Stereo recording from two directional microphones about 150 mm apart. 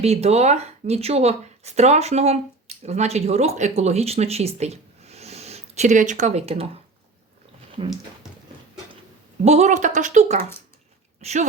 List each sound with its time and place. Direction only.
0.0 s speech: 45° right (ahead or behind)
9.4 s speech: 45° right (ahead or behind)